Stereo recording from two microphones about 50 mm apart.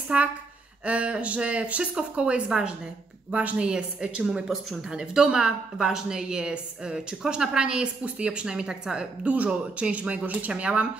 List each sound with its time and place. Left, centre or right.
0.1 s speech: right
3.3 s speech: right
3.6 s speech: centre
4.5 s speech: centre
9.2 s speech: right